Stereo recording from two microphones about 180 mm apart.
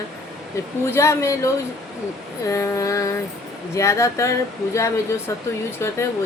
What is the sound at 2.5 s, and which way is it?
Speech, 15° left (ahead or behind).